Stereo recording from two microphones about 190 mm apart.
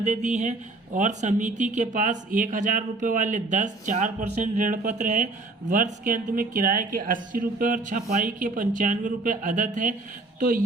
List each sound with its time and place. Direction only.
0.0 s a woman's voice: 40° right (ahead or behind)